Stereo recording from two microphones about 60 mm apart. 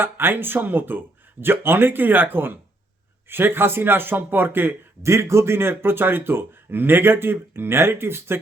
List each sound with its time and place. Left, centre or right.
0.0 s speech: right
5.0 s speech: right